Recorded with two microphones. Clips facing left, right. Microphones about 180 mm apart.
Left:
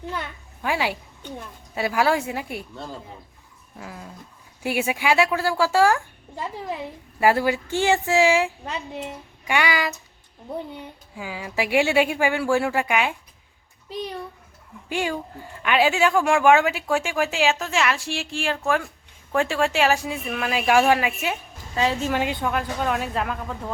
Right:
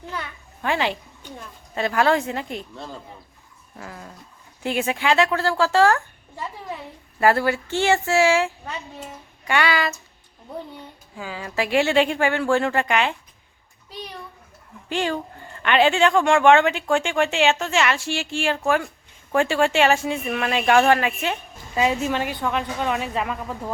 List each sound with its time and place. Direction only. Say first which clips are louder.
0.6 s speech: right 1 dB; 10° left (ahead or behind)
11.2 s speech: right 1 dB; 10° left (ahead or behind)
14.8 s speech: right 2 dB; 10° left (ahead or behind)
22.1 s a woman's voice: left 1 dB; 20° left (ahead or behind)
22.4 s speech: even; centre (ahead or behind)